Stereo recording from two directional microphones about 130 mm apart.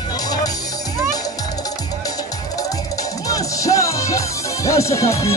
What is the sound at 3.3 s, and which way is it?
Music, 25° left (ahead or behind).